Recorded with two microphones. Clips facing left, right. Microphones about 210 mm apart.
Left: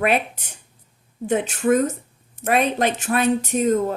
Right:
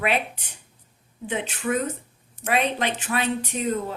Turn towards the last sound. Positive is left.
turn(degrees=45)  # may be behind; listen again after turning